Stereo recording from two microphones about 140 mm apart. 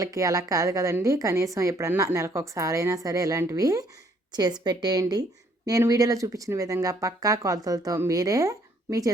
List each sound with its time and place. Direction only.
0.0 s speech: 25° right (ahead or behind)